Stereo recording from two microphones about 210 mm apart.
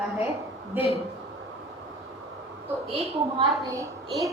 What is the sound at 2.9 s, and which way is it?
A woman's voice, 20° right (ahead or behind).